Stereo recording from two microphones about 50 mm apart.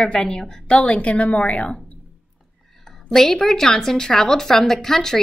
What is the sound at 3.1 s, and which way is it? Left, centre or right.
A woman's voice, centre.